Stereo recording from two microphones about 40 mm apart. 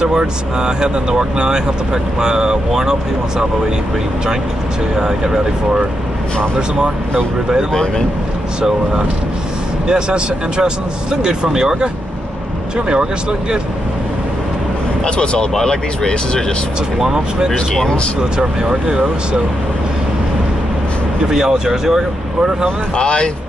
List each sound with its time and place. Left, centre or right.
0.6 s speech: centre
4.9 s speech: centre
8.5 s speech: right
15.0 s speech: left
15.5 s speech: centre
17.0 s speech: centre
21.3 s speech: centre
22.9 s speech: left